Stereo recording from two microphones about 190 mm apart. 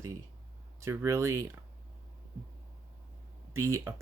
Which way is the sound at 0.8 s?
15° right (ahead or behind).